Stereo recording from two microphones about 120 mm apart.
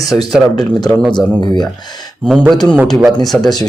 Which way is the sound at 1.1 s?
35° left (ahead or behind).